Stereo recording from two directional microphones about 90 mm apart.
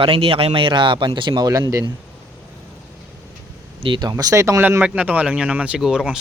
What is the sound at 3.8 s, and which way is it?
Speech, 60° right (ahead or behind).